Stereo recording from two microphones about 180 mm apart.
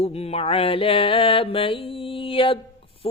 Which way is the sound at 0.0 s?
35° left (ahead or behind).